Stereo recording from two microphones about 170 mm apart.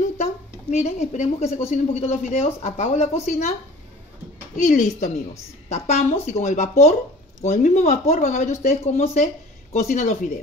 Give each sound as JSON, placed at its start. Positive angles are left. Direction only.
{"t": 0.2, "sound": "a sound", "side_deg": 40}
{"t": 2.0, "sound": "a woman's voice", "side_deg": 40}
{"t": 4.6, "sound": "a woman's voice", "side_deg": 45}